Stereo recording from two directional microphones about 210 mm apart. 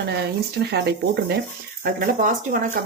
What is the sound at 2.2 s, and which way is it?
Speech, 40° right (ahead or behind).